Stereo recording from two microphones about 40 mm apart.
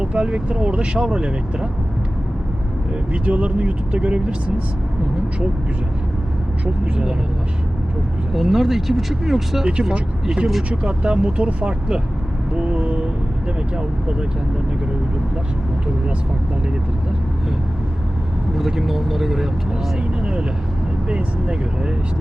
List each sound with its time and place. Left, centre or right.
0.0 s speech: right
3.1 s speech: right
8.3 s speech: centre
9.9 s speech: centre
12.5 s vehicle: right
13.7 s speech: right
18.8 s speech: centre
20.0 s speech: right